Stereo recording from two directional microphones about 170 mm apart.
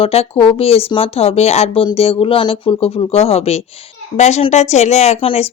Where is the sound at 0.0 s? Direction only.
35° left (ahead or behind).